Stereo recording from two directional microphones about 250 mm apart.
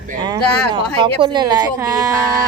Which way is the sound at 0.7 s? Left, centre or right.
Centre.